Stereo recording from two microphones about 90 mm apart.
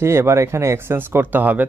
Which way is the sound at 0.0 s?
30° right (ahead or behind).